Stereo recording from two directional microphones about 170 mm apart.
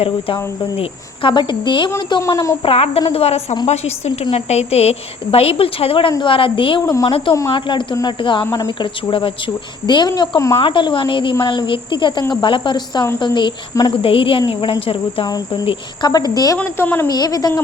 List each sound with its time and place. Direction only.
0.3 s speech: 20° left (ahead or behind)
0.8 s speech: 30° left (ahead or behind)
2.6 s a woman's voice: 35° left (ahead or behind)